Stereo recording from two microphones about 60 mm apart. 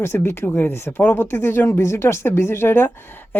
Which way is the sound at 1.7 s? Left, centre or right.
Left.